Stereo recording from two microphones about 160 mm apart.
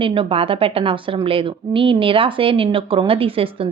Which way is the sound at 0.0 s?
35° right (ahead or behind).